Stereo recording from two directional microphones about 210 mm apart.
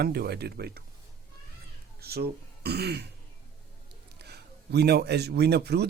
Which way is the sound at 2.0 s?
50° right (ahead or behind).